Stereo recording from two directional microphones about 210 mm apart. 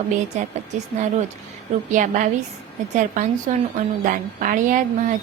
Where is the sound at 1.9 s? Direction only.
35° right (ahead or behind).